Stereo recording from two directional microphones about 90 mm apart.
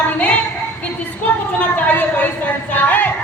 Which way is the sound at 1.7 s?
20° left (ahead or behind).